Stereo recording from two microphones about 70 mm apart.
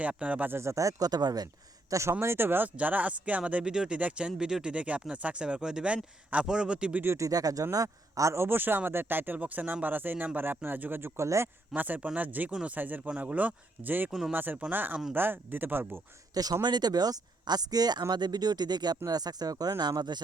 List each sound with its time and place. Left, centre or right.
0.0 s a man's voice: centre
0.5 s speech: right
1.9 s speech: right
2.2 s speech: right
2.7 s speech: right
7.2 s a man's voice: right
14.1 s speech: centre
14.3 s a man's voice: right
16.3 s speech: right
16.6 s speech: right
18.1 s speech: right
19.8 s speech: right